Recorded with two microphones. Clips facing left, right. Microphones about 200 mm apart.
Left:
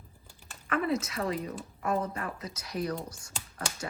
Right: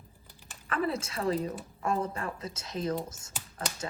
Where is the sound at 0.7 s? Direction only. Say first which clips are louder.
Left 2 dB; 30° right (ahead or behind).